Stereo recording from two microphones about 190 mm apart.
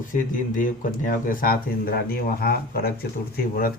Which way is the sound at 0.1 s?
45° left (ahead or behind).